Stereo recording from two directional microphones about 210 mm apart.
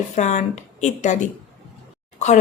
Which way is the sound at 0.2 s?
35° left (ahead or behind).